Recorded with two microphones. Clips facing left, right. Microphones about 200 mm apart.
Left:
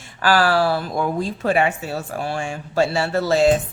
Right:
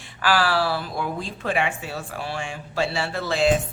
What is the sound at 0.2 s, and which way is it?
Speech, 45° left (ahead or behind).